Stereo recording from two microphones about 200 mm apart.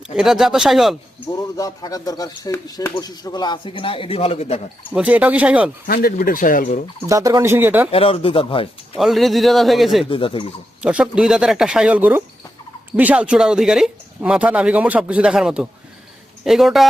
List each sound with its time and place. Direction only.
0.2 s speech: centre (ahead or behind)
1.4 s speech: 20° left (ahead or behind)
4.9 s speech: 10° right (ahead or behind)
5.9 s speech: 50° left (ahead or behind)
7.1 s speech: 15° right (ahead or behind)
7.9 s speech: 30° left (ahead or behind)
9.0 s speech: centre (ahead or behind)
10.1 s speech: 25° left (ahead or behind)
10.8 s speech: 5° right (ahead or behind)